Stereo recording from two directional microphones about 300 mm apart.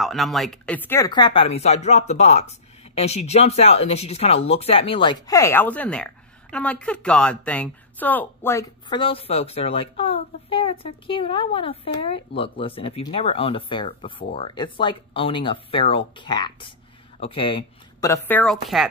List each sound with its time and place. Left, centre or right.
0.0 s speech: centre